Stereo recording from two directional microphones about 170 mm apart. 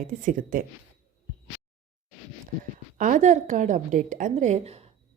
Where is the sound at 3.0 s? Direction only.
45° right (ahead or behind).